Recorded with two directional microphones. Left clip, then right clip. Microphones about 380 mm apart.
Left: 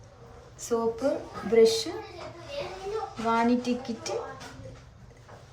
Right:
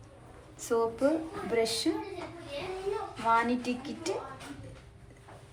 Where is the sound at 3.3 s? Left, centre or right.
Centre.